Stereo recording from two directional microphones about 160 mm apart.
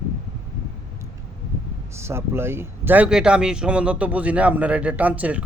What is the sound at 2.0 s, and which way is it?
Speech, 15° right (ahead or behind).